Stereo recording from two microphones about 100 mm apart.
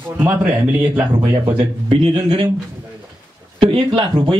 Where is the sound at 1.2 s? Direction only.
55° right (ahead or behind).